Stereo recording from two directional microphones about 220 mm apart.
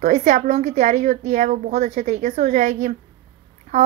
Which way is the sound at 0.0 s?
30° right (ahead or behind).